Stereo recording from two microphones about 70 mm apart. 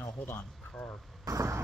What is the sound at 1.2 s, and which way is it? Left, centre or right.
Speech, right.